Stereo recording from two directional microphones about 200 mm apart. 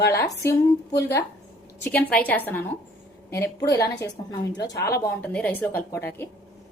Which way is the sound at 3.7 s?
15° left (ahead or behind).